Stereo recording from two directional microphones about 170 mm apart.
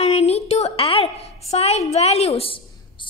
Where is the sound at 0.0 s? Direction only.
40° left (ahead or behind).